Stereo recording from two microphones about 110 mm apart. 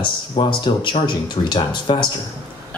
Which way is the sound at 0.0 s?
45° left (ahead or behind).